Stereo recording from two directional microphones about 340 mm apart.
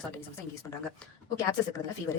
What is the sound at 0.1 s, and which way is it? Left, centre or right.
Speech, centre.